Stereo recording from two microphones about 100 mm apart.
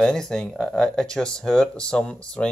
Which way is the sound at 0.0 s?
5° left (ahead or behind).